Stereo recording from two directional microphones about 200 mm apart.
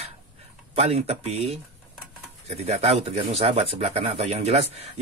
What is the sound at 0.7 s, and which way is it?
Speech, 30° right (ahead or behind).